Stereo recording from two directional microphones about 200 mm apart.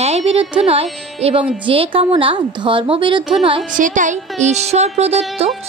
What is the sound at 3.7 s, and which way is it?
A woman's voice, 40° right (ahead or behind).